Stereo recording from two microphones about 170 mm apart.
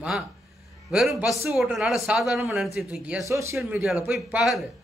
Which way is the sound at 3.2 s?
15° right (ahead or behind).